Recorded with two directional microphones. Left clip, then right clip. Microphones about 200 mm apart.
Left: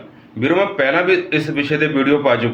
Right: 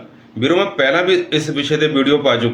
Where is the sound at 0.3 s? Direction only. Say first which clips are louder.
Right 1 dB; 20° right (ahead or behind).